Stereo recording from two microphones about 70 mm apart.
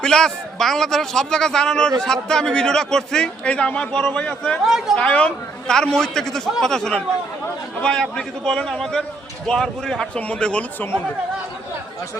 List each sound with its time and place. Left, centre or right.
0.0 s a man's voice: centre
4.6 s speech: centre
4.9 s a man's voice: centre
10.2 s a man's voice: centre